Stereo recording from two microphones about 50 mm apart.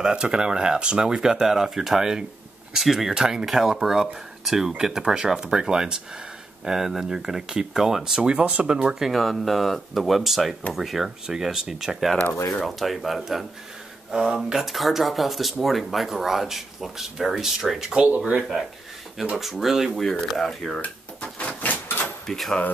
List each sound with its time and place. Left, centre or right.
0.0 s speech: centre
9.0 s speech: centre
14.1 s speech: centre
14.5 s speech: centre
19.3 s speech: centre
20.2 s speech: centre
20.8 s drawer open or close: left
21.8 s door: left
22.2 s speech: centre